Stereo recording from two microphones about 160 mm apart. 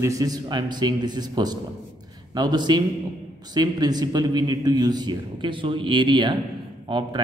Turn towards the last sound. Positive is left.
turn(degrees=-30)  # may be behind; listen again after turning